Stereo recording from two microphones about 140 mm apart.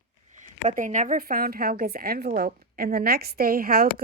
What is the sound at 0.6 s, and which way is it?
A woman's voice, 65° right (ahead or behind).